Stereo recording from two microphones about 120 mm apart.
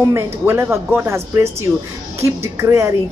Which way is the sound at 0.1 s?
20° right (ahead or behind).